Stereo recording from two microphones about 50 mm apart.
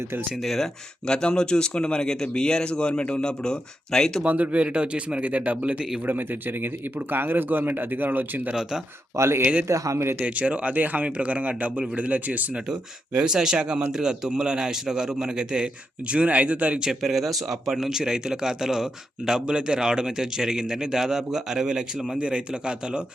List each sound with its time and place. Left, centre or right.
0.4 s speech: centre
1.0 s speech: centre
4.2 s a man's voice: right
5.7 s speech: centre
6.1 s speech: right
9.1 s speech: right
9.4 s speech: right
9.6 s speech: right
10.2 s a man's voice: right
13.1 s speech: centre
17.0 s a man's voice: centre